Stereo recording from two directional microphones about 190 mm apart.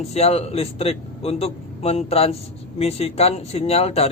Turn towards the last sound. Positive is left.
turn(degrees=30)  # may be behind; listen again after turning